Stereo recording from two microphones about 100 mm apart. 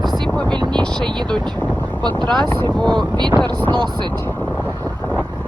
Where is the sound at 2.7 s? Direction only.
10° left (ahead or behind).